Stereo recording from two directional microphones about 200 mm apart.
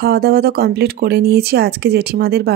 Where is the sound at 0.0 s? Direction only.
50° right (ahead or behind).